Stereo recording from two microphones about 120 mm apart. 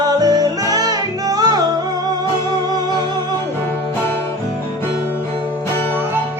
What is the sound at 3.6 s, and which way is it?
Music, 20° left (ahead or behind).